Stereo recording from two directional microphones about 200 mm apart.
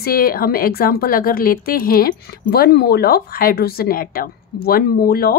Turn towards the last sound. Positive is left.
turn(degrees=50)  # may be behind; listen again after turning